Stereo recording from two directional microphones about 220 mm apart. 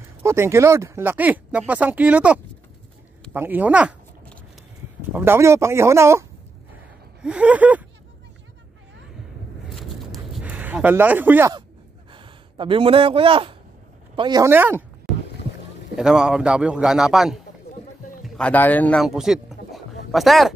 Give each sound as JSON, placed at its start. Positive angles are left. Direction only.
{"t": 0.2, "sound": "speech", "side_deg": -10}
{"t": 5.1, "sound": "speech", "side_deg": -10}
{"t": 9.7, "sound": "a sound", "side_deg": 0}
{"t": 12.1, "sound": "speech", "side_deg": -20}
{"t": 15.1, "sound": "boat", "side_deg": 0}
{"t": 16.0, "sound": "a man's voice", "side_deg": -5}